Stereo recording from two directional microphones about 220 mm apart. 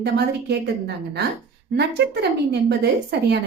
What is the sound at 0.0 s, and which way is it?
Speech, 50° right (ahead or behind).